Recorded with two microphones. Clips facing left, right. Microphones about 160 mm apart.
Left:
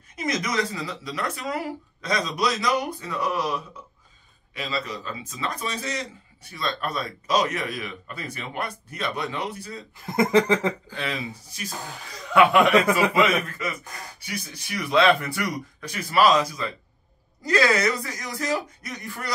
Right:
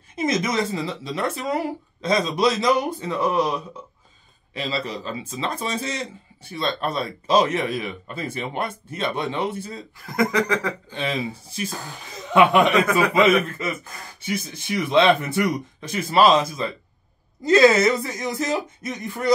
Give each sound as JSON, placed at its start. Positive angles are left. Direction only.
{"t": 0.1, "sound": "speech", "side_deg": -25}
{"t": 10.0, "sound": "a sound", "side_deg": 25}
{"t": 10.9, "sound": "a man's voice", "side_deg": -25}